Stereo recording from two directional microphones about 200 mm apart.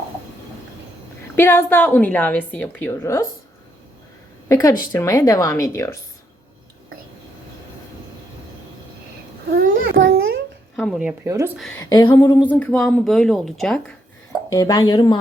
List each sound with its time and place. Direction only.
1.4 s speech: 10° left (ahead or behind)
4.4 s speech: 15° left (ahead or behind)
10.0 s a sound: 80° right
10.8 s speech: centre (ahead or behind)
11.3 s speech: 15° right (ahead or behind)
11.8 s speech: 20° left (ahead or behind); by 13.9 s 5° left (ahead or behind)
14.5 s speech: 20° left (ahead or behind)